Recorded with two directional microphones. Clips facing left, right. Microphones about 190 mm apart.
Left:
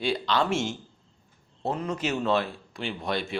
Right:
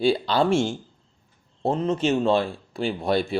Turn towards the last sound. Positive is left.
turn(degrees=-35)  # may be behind; listen again after turning